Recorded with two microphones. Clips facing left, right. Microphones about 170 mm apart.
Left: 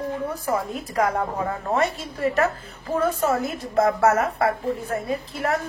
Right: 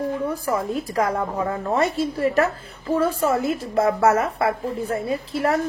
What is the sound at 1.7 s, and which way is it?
Speech, 35° right (ahead or behind).